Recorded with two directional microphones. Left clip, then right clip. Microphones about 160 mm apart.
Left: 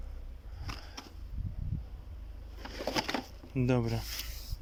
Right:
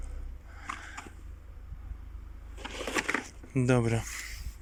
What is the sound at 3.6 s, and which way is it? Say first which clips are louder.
Speech: right 4 dB; 5° right (ahead or behind).